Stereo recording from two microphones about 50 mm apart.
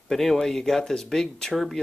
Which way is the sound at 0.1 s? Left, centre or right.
Centre.